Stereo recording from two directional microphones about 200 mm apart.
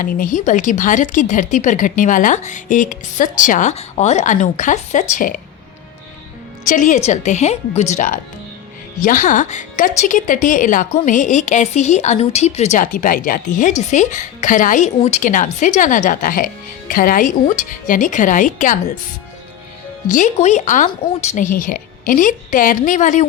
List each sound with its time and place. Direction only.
0.0 s a woman's voice: 45° left (ahead or behind)
6.7 s a woman's voice: 40° left (ahead or behind)
20.1 s a woman's voice: 40° left (ahead or behind)